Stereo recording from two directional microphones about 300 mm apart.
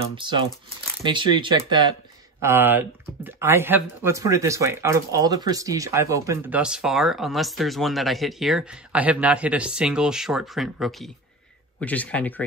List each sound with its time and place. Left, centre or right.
0.1 s speech: centre